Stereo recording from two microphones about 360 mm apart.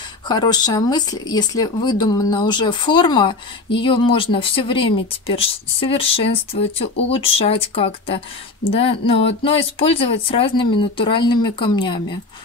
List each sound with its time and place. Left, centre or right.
0.3 s speech: centre